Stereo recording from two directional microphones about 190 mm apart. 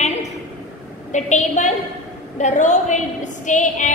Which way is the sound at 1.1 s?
40° left (ahead or behind).